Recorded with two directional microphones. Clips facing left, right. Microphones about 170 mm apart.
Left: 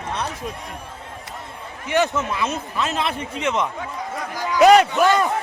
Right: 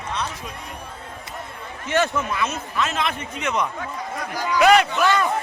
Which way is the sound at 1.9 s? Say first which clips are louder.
Left 1 dB; 20° left (ahead or behind).